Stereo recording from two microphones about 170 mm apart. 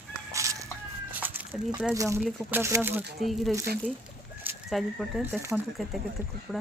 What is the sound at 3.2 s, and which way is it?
Speech, centre (ahead or behind).